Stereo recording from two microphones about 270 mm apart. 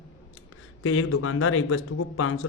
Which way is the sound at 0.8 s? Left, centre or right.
Left.